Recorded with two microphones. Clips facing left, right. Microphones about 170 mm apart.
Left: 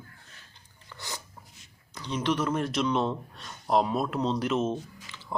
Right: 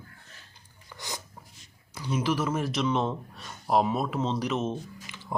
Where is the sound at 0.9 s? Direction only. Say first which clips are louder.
Right 1 dB; 15° right (ahead or behind).